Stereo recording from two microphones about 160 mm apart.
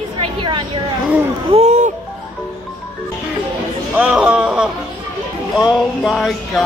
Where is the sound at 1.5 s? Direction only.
45° right (ahead or behind).